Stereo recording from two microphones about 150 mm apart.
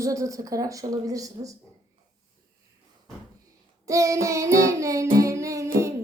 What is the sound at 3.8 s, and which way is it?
A woman's voice, 20° right (ahead or behind).